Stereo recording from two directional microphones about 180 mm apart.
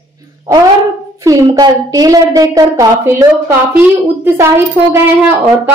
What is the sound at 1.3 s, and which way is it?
A woman's voice, 20° right (ahead or behind).